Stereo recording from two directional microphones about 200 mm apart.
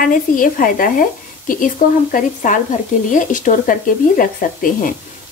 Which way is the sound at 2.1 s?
40° left (ahead or behind).